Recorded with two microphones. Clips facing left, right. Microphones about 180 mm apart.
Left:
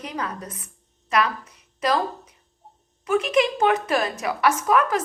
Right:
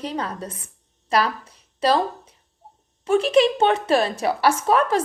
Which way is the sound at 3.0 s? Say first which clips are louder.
Right 4 dB; 30° right (ahead or behind).